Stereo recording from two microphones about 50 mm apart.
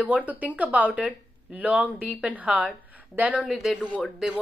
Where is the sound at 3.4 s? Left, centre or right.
Centre.